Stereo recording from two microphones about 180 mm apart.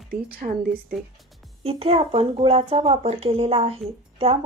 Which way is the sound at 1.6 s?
35° right (ahead or behind).